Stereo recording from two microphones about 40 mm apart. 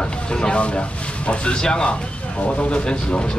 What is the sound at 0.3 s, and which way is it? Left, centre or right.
Speech, left.